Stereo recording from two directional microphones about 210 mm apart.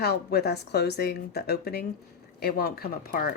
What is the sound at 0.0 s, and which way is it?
Speech, 50° left (ahead or behind).